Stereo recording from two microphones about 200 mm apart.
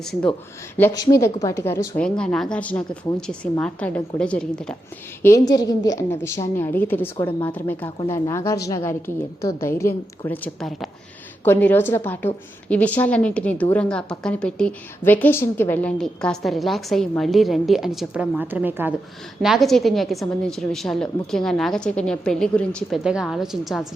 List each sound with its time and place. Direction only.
0.9 s a woman's voice: 15° left (ahead or behind)
5.2 s a woman's voice: 15° left (ahead or behind); by 23.8 s centre (ahead or behind)